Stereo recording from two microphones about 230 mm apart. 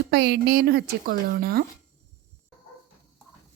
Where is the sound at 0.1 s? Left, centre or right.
Right.